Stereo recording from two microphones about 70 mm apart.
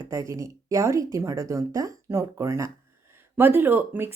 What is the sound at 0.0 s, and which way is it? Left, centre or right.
Speech, right.